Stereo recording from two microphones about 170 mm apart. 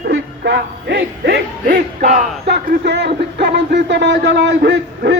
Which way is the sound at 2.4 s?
75° right (ahead or behind).